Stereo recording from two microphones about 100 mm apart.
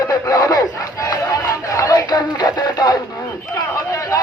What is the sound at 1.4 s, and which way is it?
Music, 35° left (ahead or behind).